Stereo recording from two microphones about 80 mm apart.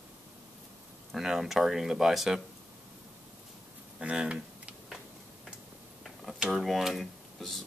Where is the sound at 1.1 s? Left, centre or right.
Centre.